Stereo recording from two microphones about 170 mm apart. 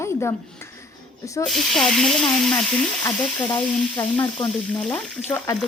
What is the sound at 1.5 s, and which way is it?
Sizzle, centre (ahead or behind).